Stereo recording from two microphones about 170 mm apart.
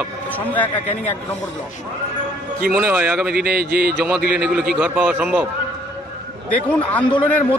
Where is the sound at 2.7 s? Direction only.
10° right (ahead or behind).